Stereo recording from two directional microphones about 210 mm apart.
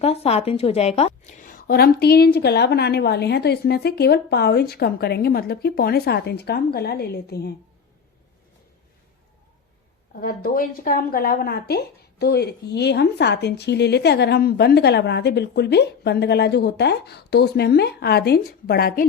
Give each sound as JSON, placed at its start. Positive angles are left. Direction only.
{"t": 0.0, "sound": "a woman's voice", "side_deg": 30}
{"t": 10.2, "sound": "a woman's voice", "side_deg": 45}